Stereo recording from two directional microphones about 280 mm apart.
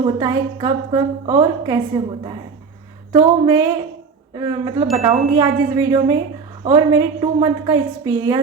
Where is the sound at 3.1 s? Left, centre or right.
Centre.